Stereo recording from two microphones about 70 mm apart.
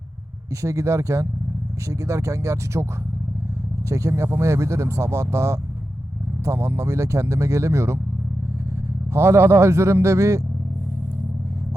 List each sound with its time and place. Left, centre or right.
0.6 s speech: right
3.8 s speech: right
4.1 s speech: right
9.1 s speech: right